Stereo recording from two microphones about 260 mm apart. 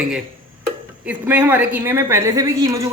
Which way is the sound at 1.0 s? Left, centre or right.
Centre.